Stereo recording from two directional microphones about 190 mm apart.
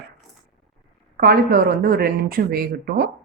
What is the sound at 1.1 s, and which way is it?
A woman's voice, 50° right (ahead or behind).